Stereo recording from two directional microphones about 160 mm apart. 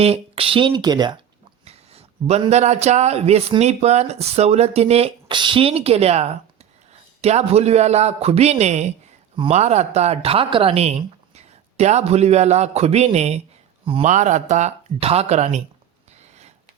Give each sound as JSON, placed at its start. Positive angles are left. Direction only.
{"t": 0.0, "sound": "speech", "side_deg": -35}
{"t": 1.6, "sound": "speech", "side_deg": -40}